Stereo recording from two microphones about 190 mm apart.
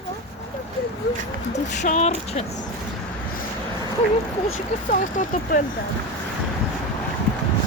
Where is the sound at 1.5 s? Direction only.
40° left (ahead or behind).